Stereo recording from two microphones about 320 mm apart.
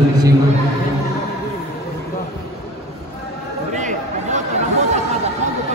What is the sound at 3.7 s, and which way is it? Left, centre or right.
Chatter, right.